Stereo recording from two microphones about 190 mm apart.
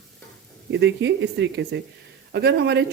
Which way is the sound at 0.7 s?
70° right (ahead or behind).